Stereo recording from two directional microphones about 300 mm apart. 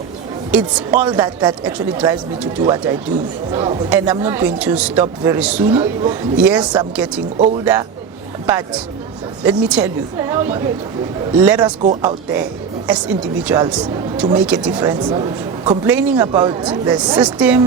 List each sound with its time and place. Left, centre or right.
0.5 s speech: centre
7.3 s speech: right
7.6 s speech: centre
11.8 s speech: right
12.9 s speech: centre